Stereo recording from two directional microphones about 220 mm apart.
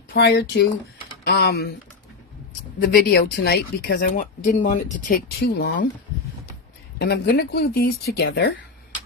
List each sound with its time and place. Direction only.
0.1 s speech: 50° left (ahead or behind)
2.8 s speech: 45° left (ahead or behind)
7.0 s speech: 45° left (ahead or behind)